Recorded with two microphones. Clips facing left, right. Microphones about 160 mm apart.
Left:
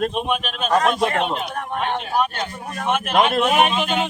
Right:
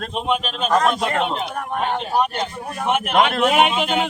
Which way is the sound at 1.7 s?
10° right (ahead or behind).